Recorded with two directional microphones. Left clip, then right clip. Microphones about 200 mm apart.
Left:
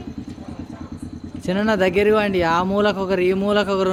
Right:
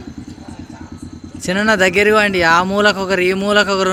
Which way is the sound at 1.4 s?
Centre (ahead or behind).